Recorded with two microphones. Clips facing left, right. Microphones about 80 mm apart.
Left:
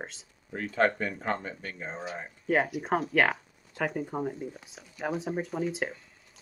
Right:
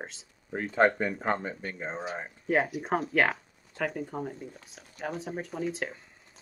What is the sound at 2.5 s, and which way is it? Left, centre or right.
Speech, centre.